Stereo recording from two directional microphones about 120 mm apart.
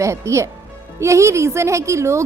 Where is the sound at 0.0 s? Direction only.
25° right (ahead or behind).